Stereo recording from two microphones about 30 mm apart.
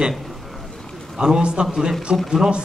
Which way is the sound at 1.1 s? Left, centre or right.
Right.